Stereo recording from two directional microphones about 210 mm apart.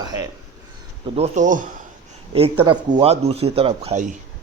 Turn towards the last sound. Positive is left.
turn(degrees=-30)  # may be behind; listen again after turning